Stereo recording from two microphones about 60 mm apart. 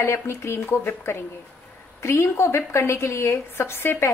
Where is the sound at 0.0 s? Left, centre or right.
Left.